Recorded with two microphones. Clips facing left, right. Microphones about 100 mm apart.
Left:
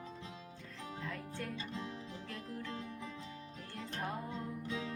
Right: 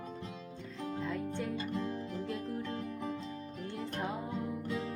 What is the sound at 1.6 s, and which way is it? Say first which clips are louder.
Music: right 7 dB; 55° right (ahead or behind).